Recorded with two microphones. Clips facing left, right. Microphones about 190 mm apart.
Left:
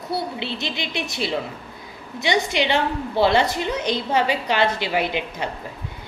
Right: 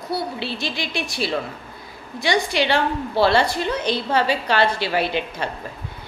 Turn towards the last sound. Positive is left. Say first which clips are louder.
# right 1 dB
turn(degrees=15)  # may be behind; listen again after turning